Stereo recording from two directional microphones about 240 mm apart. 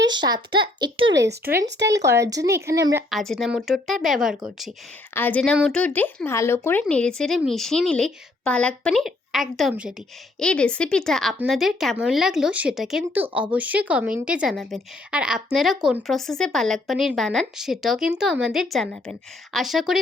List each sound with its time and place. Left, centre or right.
0.1 s speech: centre
0.9 s speech: right
1.9 s speech: centre
3.1 s speech: centre